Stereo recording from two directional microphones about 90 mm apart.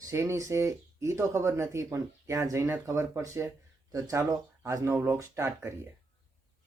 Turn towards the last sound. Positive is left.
turn(degrees=-30)  # may be behind; listen again after turning